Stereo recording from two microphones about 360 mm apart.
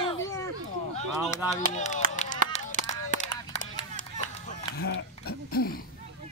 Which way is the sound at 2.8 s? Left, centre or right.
Right.